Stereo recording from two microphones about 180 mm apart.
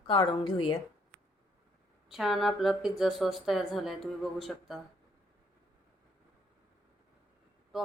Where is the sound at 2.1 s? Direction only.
Centre (ahead or behind).